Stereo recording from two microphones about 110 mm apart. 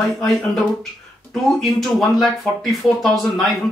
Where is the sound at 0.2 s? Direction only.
5° left (ahead or behind).